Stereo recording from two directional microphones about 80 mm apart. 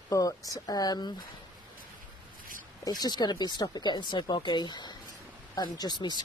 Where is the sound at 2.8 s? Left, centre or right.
Left.